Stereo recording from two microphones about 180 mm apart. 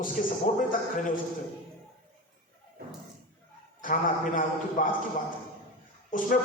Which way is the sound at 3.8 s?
50° left (ahead or behind).